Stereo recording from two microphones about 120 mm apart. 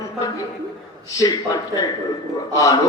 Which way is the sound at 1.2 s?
30° left (ahead or behind).